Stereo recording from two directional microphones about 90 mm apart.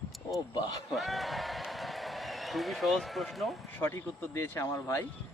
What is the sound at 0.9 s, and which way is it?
A man's voice, centre (ahead or behind).